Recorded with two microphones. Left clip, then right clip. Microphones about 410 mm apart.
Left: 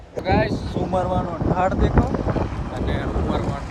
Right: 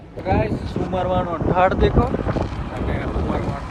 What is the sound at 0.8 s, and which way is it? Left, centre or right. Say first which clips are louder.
Speech: left 1 dB; right.